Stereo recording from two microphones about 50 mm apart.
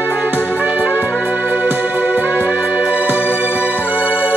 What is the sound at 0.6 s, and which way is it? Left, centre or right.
Music, right.